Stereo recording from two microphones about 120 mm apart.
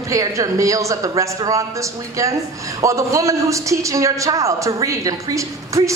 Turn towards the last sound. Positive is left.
turn(degrees=-25)  # may be behind; listen again after turning